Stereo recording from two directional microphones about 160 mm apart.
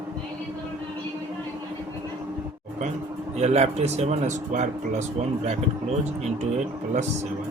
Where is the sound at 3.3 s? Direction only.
40° right (ahead or behind).